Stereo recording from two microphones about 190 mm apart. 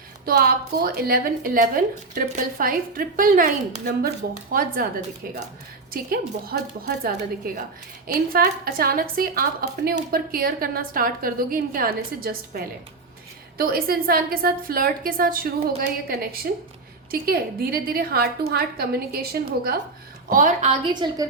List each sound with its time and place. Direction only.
0.3 s a woman's voice: 55° right (ahead or behind)
20.3 s a woman's voice: 45° right (ahead or behind); by 21.2 s 25° right (ahead or behind)